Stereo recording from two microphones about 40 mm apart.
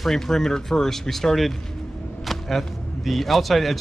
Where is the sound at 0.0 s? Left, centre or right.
Centre.